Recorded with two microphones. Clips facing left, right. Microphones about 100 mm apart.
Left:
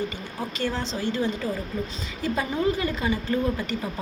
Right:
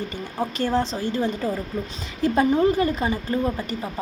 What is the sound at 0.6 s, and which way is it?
A woman's voice, 55° right (ahead or behind).